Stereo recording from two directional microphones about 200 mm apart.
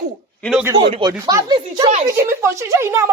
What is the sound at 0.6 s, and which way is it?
Speech, 20° right (ahead or behind).